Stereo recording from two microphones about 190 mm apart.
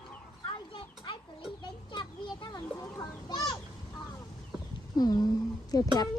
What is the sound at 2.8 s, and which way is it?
Chicken, 20° left (ahead or behind).